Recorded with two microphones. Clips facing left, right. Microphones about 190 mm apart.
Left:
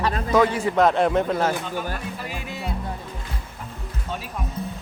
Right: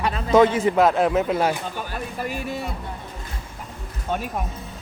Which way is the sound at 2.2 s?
45° right (ahead or behind).